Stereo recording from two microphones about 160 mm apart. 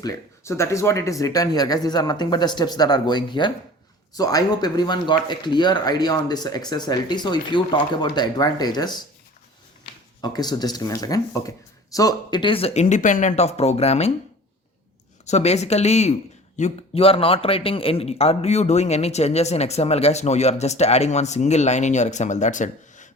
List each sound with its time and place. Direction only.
0.0 s speech: 20° left (ahead or behind)
10.2 s speech: 25° left (ahead or behind); by 14.1 s 40° left (ahead or behind)
15.3 s a man's voice: 45° left (ahead or behind)